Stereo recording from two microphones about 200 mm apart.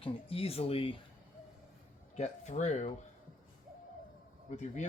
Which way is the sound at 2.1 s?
35° left (ahead or behind).